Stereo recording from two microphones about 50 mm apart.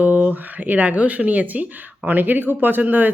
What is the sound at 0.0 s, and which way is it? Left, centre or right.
Speech, right.